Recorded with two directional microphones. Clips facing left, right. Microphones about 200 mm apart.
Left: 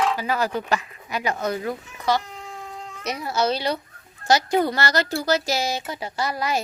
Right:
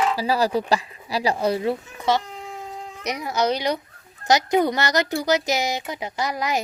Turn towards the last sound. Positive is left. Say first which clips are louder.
# even
turn(degrees=-15)  # may be behind; listen again after turning